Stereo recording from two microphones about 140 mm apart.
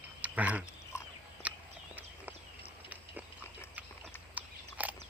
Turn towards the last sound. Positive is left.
turn(degrees=-10)  # may be behind; listen again after turning